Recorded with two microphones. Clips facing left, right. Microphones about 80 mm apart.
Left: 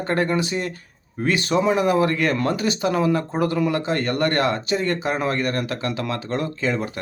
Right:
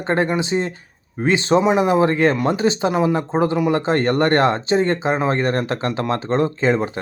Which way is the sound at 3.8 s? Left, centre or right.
Right.